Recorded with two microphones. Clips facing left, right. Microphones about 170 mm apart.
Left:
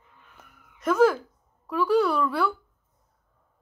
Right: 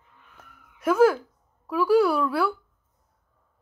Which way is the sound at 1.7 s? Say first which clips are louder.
Right 2 dB; 5° right (ahead or behind).